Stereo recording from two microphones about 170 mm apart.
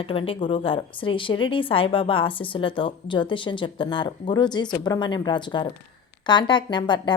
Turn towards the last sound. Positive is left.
turn(degrees=25)  # may be behind; listen again after turning